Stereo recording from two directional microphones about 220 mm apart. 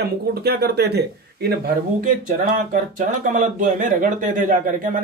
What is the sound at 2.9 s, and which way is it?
Speech, 35° right (ahead or behind).